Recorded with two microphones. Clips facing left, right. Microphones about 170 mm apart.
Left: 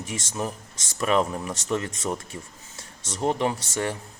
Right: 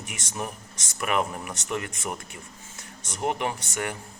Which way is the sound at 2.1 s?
30° left (ahead or behind).